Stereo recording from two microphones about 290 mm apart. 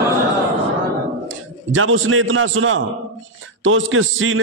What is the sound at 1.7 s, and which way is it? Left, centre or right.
A man's voice, right.